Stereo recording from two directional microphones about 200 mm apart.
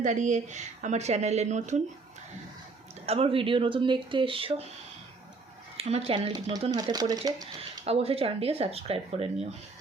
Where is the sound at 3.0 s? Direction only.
30° right (ahead or behind).